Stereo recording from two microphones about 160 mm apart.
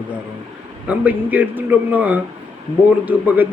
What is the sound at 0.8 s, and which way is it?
A man's voice, 10° right (ahead or behind).